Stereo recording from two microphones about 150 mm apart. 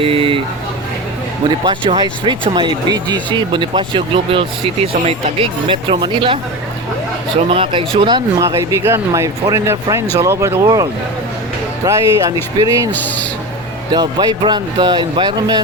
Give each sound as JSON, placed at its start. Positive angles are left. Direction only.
{"t": 0.0, "sound": "a sound", "side_deg": -35}
{"t": 1.5, "sound": "speech", "side_deg": -35}
{"t": 7.5, "sound": "speech", "side_deg": -35}
{"t": 11.9, "sound": "speech", "side_deg": -20}
{"t": 12.9, "sound": "speech", "side_deg": 10}
{"t": 13.9, "sound": "speech", "side_deg": -25}